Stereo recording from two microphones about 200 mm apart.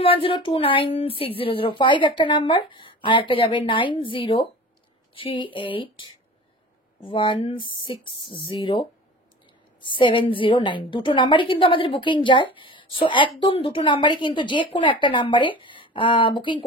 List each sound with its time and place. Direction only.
0.0 s a woman's voice: 25° left (ahead or behind)